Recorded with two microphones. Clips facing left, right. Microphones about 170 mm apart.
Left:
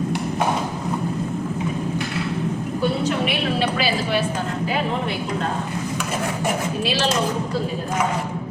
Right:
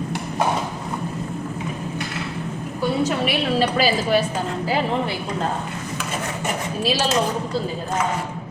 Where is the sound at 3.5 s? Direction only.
40° right (ahead or behind).